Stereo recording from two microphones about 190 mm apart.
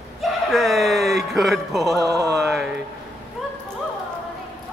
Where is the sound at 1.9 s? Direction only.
20° right (ahead or behind).